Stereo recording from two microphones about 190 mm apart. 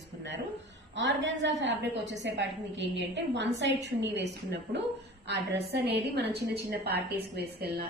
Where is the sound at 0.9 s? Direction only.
70° right (ahead or behind).